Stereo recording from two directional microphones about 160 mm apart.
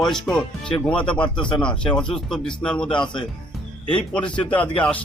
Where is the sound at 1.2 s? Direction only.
30° left (ahead or behind).